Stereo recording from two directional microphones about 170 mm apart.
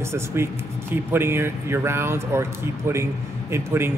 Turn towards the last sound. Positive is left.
turn(degrees=-15)  # may be behind; listen again after turning